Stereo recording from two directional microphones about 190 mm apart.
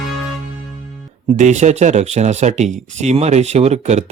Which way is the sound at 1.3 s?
40° right (ahead or behind).